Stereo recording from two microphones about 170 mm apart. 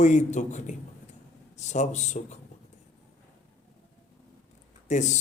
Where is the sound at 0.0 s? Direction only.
45° left (ahead or behind).